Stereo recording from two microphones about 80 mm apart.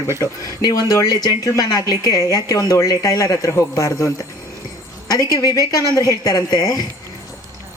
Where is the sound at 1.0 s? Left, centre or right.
Left.